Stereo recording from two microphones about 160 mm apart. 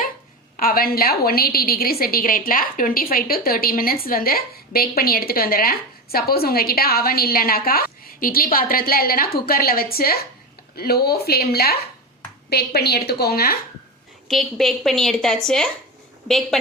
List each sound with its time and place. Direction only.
0.5 s a woman's voice: 65° left (ahead or behind)
12.5 s a woman's voice: 85° left
14.3 s a woman's voice: centre (ahead or behind)